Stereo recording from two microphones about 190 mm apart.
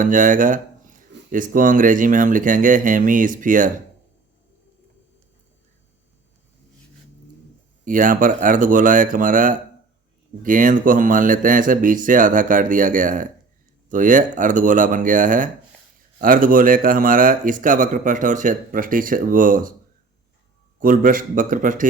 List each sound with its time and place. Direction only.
0.0 s speech: 45° right (ahead or behind)
7.9 s speech: 45° right (ahead or behind)
20.7 s speech: 45° right (ahead or behind)